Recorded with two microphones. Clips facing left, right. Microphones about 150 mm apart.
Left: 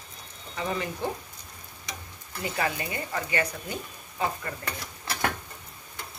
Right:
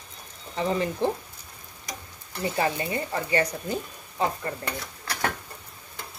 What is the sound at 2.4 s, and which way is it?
Speech, 30° right (ahead or behind).